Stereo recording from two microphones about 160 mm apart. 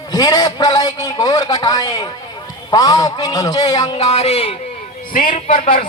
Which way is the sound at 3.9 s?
40° left (ahead or behind).